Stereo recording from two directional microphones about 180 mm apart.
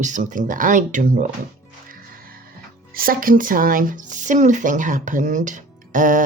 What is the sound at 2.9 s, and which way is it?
Speech, 50° right (ahead or behind).